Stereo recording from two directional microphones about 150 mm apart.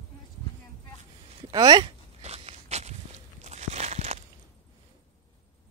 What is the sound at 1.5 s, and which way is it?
Speech, 25° right (ahead or behind).